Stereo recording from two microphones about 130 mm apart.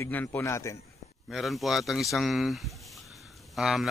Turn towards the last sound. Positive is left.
turn(degrees=-5)  # may be behind; listen again after turning